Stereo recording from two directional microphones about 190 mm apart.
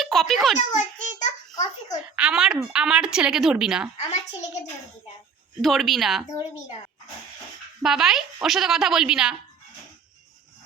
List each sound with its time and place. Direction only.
0.0 s a child's voice: centre (ahead or behind)
0.5 s a sound: 40° left (ahead or behind)
2.1 s a woman's voice: 5° right (ahead or behind)
3.9 s a woman's voice: 35° left (ahead or behind)
5.6 s a woman's voice: centre (ahead or behind)
7.8 s a woman's voice: centre (ahead or behind)